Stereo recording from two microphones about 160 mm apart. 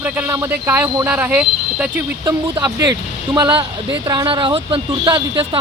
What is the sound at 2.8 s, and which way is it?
Speech, 25° right (ahead or behind).